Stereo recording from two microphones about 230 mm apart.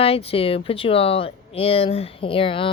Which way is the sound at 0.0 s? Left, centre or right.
Left.